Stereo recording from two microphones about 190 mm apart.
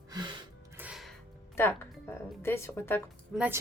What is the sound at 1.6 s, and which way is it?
Speech, 15° left (ahead or behind).